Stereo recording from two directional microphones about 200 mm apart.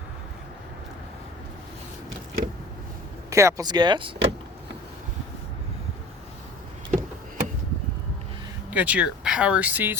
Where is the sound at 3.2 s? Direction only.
15° right (ahead or behind).